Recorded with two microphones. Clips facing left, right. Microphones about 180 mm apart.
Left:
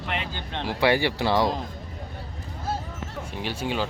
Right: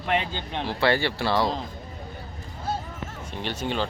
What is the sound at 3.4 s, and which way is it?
Speech, 5° left (ahead or behind).